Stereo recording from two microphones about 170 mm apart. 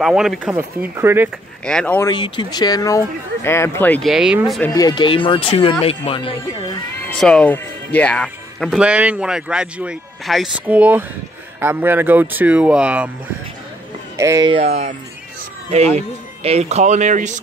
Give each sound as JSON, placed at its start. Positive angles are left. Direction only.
{"t": 0.0, "sound": "speech", "side_deg": -5}
{"t": 1.6, "sound": "speech", "side_deg": 5}
{"t": 2.0, "sound": "speech", "side_deg": 30}
{"t": 4.1, "sound": "speech", "side_deg": -5}
{"t": 4.7, "sound": "speech", "side_deg": 25}
{"t": 7.1, "sound": "speech", "side_deg": 5}
{"t": 14.1, "sound": "speech", "side_deg": -15}
{"t": 14.6, "sound": "speech", "side_deg": -40}
{"t": 16.4, "sound": "speech", "side_deg": -40}